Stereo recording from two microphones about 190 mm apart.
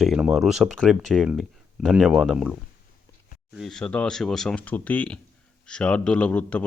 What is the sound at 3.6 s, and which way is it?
Speech, 5° left (ahead or behind).